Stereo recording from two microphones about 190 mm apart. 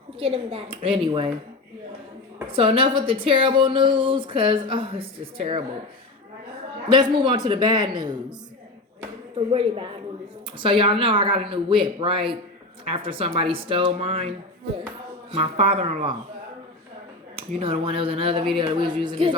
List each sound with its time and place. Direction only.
0.2 s speech: 30° right (ahead or behind)
2.5 s speech: 30° right (ahead or behind)
6.8 s speech: 25° right (ahead or behind)
9.5 s speech: 30° right (ahead or behind)
15.3 s speech: 30° right (ahead or behind)
17.3 s speech: 30° right (ahead or behind)